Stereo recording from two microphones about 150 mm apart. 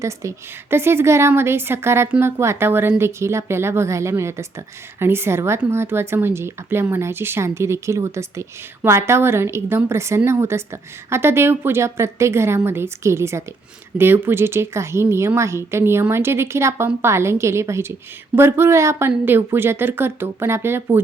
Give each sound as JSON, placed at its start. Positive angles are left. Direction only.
{"t": 0.0, "sound": "speech", "side_deg": -20}